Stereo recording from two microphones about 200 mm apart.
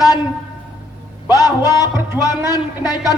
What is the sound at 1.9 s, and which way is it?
Speech, 10° right (ahead or behind).